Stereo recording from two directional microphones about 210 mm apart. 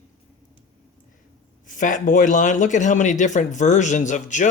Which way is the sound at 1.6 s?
40° left (ahead or behind).